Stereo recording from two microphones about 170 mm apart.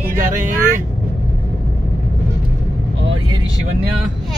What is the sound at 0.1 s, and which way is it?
Vehicle, 50° right (ahead or behind).